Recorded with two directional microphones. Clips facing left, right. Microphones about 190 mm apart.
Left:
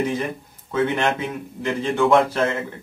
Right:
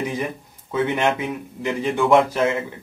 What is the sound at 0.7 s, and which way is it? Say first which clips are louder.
Speech: even; 15° right (ahead or behind).